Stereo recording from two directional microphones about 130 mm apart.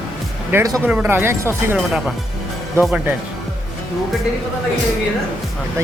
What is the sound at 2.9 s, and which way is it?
Speech, 10° right (ahead or behind).